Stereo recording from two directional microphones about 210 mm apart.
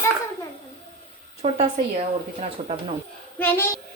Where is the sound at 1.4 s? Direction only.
30° right (ahead or behind).